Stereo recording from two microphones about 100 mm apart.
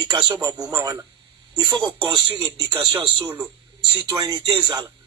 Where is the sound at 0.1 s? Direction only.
45° right (ahead or behind).